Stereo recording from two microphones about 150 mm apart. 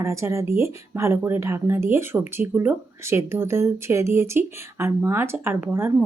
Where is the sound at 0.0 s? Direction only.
20° right (ahead or behind).